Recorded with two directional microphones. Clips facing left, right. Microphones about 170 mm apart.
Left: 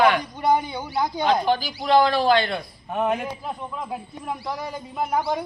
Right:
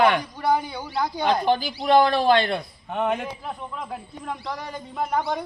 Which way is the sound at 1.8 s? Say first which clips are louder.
Even; 25° right (ahead or behind).